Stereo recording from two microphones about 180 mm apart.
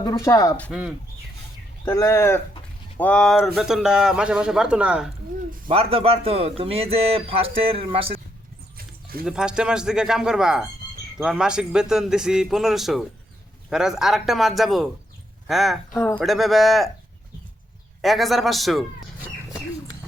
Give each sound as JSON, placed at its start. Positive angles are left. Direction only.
{"t": 0.0, "sound": "speech", "side_deg": 20}
{"t": 0.7, "sound": "speech", "side_deg": -5}
{"t": 1.8, "sound": "speech", "side_deg": 15}
{"t": 5.6, "sound": "speech", "side_deg": -35}
{"t": 9.2, "sound": "speech", "side_deg": -5}
{"t": 18.0, "sound": "speech", "side_deg": 0}